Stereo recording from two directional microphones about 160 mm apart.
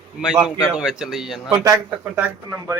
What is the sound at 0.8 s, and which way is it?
Speech, centre (ahead or behind).